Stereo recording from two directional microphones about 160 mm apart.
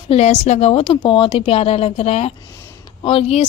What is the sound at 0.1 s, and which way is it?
A woman's voice, 45° left (ahead or behind).